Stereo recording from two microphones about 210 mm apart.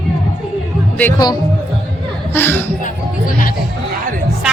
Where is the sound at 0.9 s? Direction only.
10° left (ahead or behind).